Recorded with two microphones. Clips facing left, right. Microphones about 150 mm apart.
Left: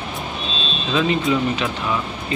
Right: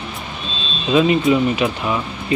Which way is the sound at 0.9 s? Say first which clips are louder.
Right 5 dB; 20° right (ahead or behind).